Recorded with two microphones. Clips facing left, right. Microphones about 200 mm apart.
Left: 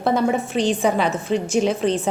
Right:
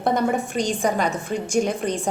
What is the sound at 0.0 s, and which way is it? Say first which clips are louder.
Speech: left 2 dB; centre (ahead or behind).